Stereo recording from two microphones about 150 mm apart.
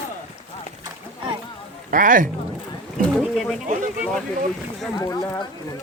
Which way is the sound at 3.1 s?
Centre (ahead or behind).